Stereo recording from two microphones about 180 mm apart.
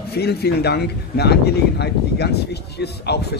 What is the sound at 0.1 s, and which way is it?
A man's voice, 65° left (ahead or behind).